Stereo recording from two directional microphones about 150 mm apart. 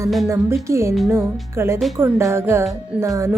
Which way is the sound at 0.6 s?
20° right (ahead or behind).